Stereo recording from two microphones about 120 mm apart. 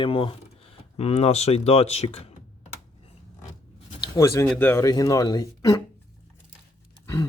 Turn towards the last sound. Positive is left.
turn(degrees=25)  # may be behind; listen again after turning